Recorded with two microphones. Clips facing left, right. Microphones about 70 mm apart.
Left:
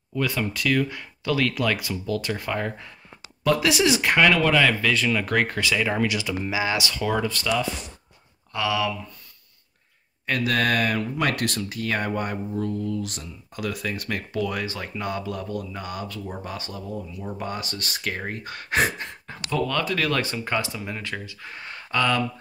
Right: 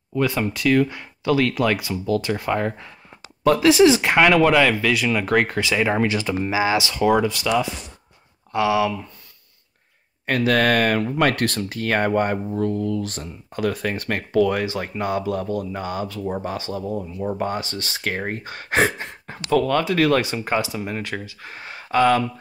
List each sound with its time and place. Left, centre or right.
0.1 s speech: right
6.6 s speech: right
10.5 s speech: right
14.5 s speech: right
16.9 s speech: right
18.0 s speech: right
20.4 s speech: centre
20.7 s speech: right